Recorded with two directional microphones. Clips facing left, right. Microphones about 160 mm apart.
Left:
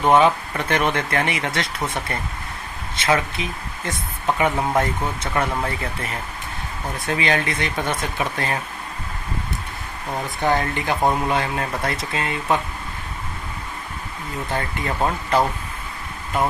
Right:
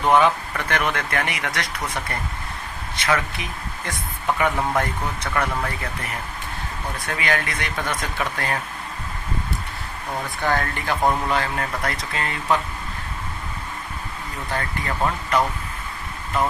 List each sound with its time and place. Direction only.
0.0 s speech: 20° left (ahead or behind)
7.0 s speech: 25° left (ahead or behind)
10.4 s speech: 20° left (ahead or behind)
14.5 s speech: 25° left (ahead or behind)